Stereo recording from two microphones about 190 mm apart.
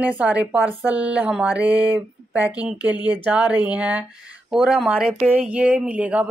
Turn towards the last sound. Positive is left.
turn(degrees=-5)  # may be behind; listen again after turning